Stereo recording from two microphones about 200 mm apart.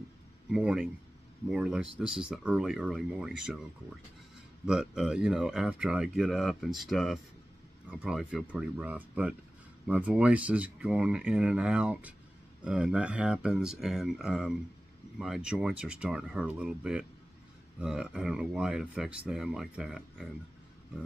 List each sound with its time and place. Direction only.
0.5 s speech: 5° right (ahead or behind)
4.6 s speech: 5° right (ahead or behind)